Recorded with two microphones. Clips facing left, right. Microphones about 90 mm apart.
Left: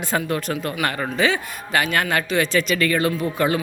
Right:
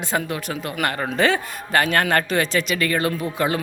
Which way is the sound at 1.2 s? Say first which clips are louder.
Right 2 dB; 45° right (ahead or behind).